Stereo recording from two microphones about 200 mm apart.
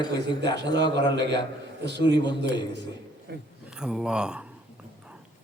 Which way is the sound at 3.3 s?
55° right (ahead or behind).